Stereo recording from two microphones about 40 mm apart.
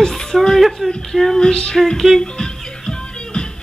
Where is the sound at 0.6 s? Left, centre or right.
Centre.